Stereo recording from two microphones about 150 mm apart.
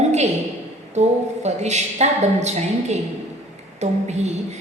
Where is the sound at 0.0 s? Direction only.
50° right (ahead or behind).